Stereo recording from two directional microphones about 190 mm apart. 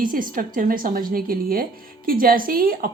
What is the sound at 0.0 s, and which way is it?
A woman's voice, 45° right (ahead or behind).